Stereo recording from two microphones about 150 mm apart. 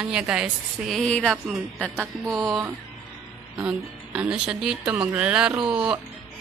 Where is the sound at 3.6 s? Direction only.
5° right (ahead or behind).